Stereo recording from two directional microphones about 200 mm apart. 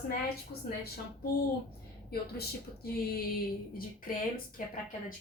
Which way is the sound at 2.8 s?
50° left (ahead or behind).